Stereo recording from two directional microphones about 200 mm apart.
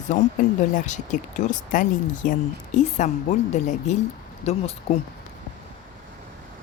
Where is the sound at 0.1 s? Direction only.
35° left (ahead or behind).